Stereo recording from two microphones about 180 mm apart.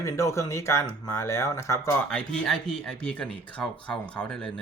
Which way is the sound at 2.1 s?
5° left (ahead or behind).